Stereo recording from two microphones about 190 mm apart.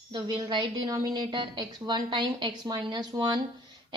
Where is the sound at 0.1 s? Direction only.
25° right (ahead or behind).